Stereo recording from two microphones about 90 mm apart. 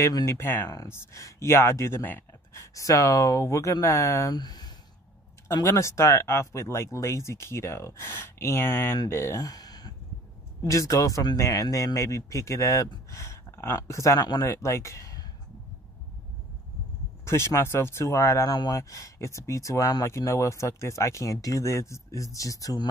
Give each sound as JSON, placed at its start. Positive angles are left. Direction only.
{"t": 0.0, "sound": "speech", "side_deg": 35}
{"t": 2.5, "sound": "speech", "side_deg": 40}
{"t": 4.3, "sound": "speech", "side_deg": 50}
{"t": 5.5, "sound": "speech", "side_deg": 35}
{"t": 9.4, "sound": "a sound", "side_deg": 45}
{"t": 10.6, "sound": "speech", "side_deg": 35}
{"t": 14.2, "sound": "speech", "side_deg": 50}
{"t": 14.5, "sound": "speech", "side_deg": 35}
{"t": 17.2, "sound": "speech", "side_deg": 30}